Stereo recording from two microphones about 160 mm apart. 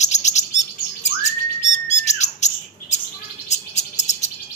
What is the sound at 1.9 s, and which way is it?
Bird, 45° left (ahead or behind).